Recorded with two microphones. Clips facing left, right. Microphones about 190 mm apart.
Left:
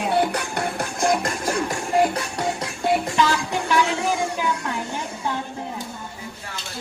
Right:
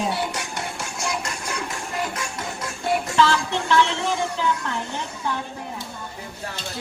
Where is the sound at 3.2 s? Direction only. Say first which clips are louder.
Right 1 dB; 15° left (ahead or behind).